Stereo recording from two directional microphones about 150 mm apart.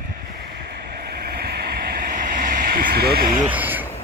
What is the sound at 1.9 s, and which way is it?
Vehicle, 65° right (ahead or behind).